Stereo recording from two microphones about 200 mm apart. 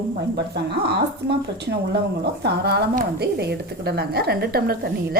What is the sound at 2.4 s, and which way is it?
Speech, 55° right (ahead or behind).